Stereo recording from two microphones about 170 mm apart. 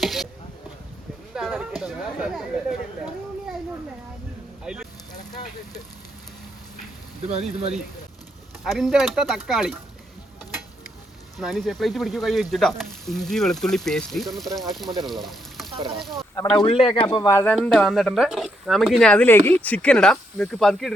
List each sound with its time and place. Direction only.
0.0 s speech: centre (ahead or behind)
1.3 s speech: 5° right (ahead or behind)
4.6 s speech: 5° right (ahead or behind)
7.3 s speech: 40° right (ahead or behind)
8.6 s speech: centre (ahead or behind)
11.3 s speech: centre (ahead or behind)
16.6 s speech: 30° left (ahead or behind)
17.5 s speech: centre (ahead or behind)